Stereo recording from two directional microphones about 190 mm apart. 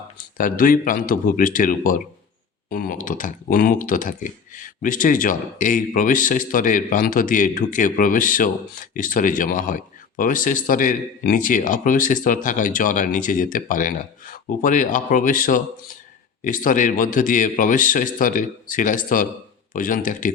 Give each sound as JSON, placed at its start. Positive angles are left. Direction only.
{"t": 0.3, "sound": "speech", "side_deg": 45}